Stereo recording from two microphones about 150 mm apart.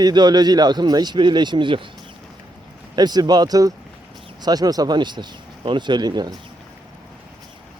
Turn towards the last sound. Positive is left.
turn(degrees=-30)  # may be behind; listen again after turning